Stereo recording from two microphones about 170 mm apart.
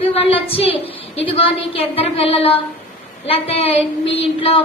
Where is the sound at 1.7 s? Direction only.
35° left (ahead or behind).